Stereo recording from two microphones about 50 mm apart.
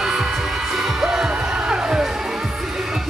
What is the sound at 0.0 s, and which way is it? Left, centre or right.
Music, centre.